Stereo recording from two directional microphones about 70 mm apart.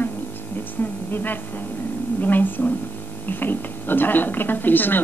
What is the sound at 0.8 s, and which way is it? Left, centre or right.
A woman's voice, left.